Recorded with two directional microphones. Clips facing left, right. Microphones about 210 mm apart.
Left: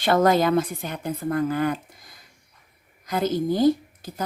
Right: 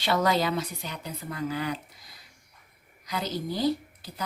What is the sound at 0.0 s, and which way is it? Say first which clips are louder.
A woman's voice: left 6 dB; 50° left (ahead or behind).